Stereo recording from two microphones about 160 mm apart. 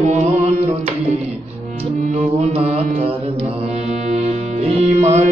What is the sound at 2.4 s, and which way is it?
Mantra, 40° right (ahead or behind).